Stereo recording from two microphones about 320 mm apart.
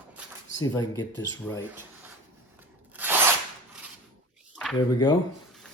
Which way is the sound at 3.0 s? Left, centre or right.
Centre.